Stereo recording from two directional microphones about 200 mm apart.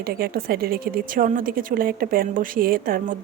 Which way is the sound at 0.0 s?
50° right (ahead or behind).